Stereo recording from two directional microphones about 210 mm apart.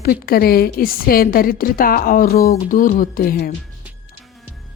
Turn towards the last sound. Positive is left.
turn(degrees=45)  # may be behind; listen again after turning